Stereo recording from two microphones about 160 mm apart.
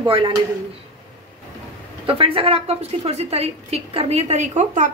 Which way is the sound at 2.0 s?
35° right (ahead or behind).